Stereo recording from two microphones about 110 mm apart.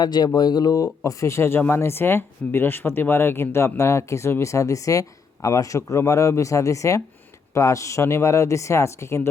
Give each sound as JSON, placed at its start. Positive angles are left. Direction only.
{"t": 0.0, "sound": "speech", "side_deg": 40}